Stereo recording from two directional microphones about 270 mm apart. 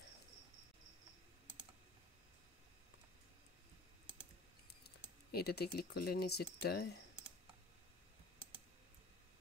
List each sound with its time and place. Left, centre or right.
5.3 s speech: left